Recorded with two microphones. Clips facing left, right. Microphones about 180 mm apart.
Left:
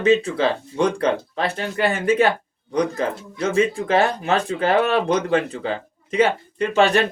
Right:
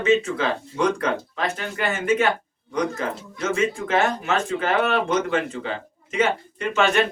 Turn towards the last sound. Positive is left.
turn(degrees=35)  # may be behind; listen again after turning